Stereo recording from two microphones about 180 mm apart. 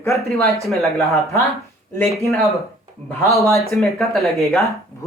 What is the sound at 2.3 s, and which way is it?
Speech, centre (ahead or behind).